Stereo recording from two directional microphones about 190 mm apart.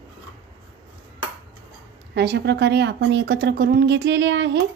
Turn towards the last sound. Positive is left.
turn(degrees=-70)  # may be behind; listen again after turning